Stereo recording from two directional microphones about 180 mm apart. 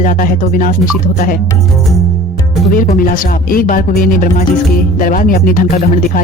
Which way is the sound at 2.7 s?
50° left (ahead or behind).